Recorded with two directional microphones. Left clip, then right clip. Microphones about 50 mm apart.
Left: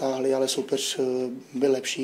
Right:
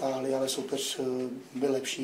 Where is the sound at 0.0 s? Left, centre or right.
Left.